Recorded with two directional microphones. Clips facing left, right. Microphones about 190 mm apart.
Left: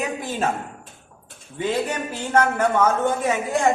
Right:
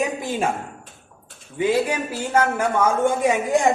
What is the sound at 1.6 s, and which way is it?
A man's voice, 10° right (ahead or behind).